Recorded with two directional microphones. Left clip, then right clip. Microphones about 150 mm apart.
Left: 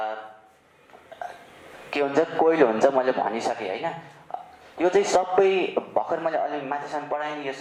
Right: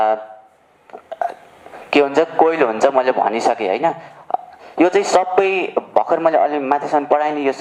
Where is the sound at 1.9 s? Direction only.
30° right (ahead or behind).